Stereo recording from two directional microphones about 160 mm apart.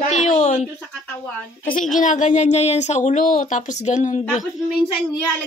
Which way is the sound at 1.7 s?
55° left (ahead or behind).